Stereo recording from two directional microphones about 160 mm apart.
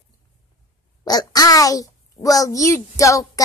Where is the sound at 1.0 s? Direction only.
25° left (ahead or behind).